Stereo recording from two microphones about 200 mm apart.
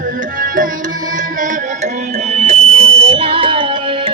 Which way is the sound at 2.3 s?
30° right (ahead or behind).